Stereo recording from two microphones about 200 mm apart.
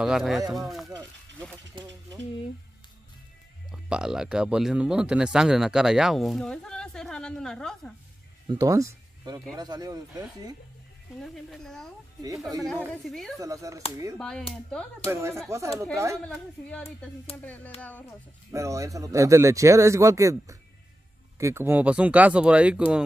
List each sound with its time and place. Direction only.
0.0 s speech: centre (ahead or behind)
1.8 s speech: 20° right (ahead or behind)
3.7 s speech: 5° right (ahead or behind)
8.5 s speech: 15° right (ahead or behind)
11.1 s speech: centre (ahead or behind)
13.4 s speech: 15° right (ahead or behind)
14.1 s speech: 5° left (ahead or behind)
15.0 s speech: 15° right (ahead or behind)
16.3 s speech: 5° left (ahead or behind)
18.5 s speech: 15° right (ahead or behind)